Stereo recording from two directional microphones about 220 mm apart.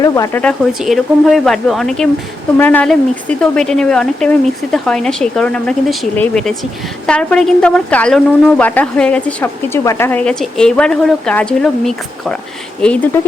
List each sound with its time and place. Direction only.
0.0 s speech: 15° left (ahead or behind)
0.8 s a woman's voice: centre (ahead or behind)